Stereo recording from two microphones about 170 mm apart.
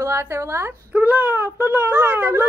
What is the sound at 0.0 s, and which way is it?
Speech, 15° right (ahead or behind).